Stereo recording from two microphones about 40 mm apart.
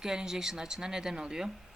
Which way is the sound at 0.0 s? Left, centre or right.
Centre.